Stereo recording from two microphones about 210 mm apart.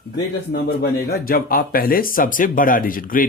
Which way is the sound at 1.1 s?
45° left (ahead or behind).